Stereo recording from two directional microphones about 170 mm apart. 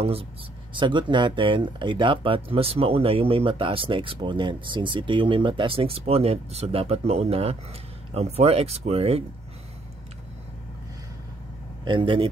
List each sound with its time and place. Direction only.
0.0 s speech: 35° right (ahead or behind)
11.8 s speech: 30° right (ahead or behind)